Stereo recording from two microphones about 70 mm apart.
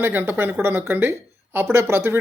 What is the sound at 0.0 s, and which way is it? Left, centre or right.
Speech, right.